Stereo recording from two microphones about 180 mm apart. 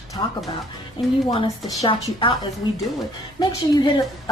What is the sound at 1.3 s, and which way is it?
Speech, 30° left (ahead or behind).